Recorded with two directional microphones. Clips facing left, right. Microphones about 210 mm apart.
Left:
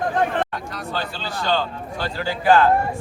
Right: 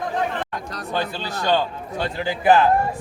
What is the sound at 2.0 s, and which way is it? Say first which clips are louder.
Speech: right 2 dB; 20° right (ahead or behind).